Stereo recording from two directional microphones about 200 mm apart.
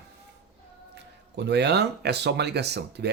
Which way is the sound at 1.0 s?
55° right (ahead or behind).